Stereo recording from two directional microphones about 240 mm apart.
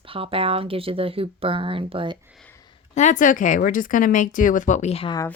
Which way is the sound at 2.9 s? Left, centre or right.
Left.